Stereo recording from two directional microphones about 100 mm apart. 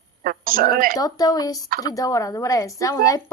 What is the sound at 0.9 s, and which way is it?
A woman's voice, 40° left (ahead or behind).